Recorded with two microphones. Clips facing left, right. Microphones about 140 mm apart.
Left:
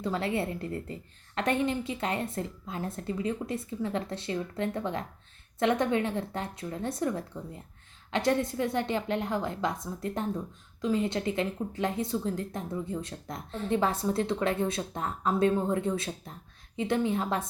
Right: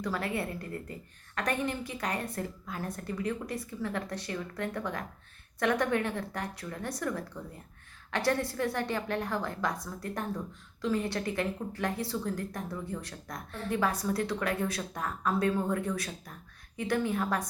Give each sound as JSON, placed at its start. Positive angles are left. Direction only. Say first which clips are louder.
{"t": 0.0, "sound": "a woman's voice", "louder": "left 3 dB", "side_deg": 25}